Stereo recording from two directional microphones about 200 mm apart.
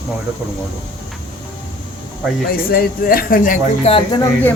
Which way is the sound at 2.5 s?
50° left (ahead or behind).